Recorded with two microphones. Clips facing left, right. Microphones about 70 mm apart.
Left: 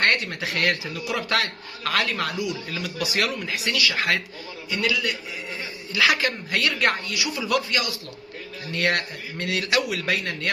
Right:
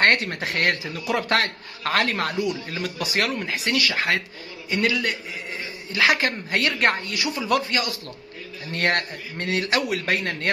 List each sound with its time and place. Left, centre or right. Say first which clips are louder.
0.0 s a man's voice: right 3 dB; right